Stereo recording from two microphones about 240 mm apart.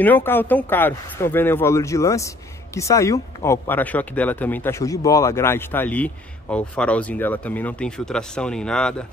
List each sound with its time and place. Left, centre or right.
0.0 s speech: centre